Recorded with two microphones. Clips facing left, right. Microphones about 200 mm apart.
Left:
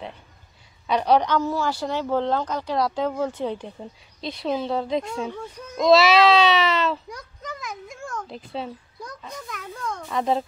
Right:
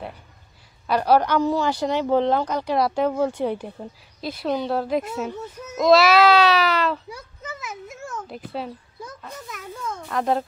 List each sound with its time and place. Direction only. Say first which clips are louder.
0.8 s speech: right 1 dB; 5° right (ahead or behind)